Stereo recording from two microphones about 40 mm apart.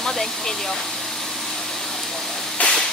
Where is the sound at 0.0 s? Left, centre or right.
Centre.